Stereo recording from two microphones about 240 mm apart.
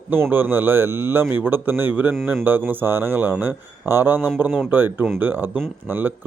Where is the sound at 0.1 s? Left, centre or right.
Centre.